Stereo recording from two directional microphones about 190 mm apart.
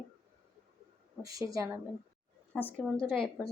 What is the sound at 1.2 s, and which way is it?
Speech, 20° right (ahead or behind).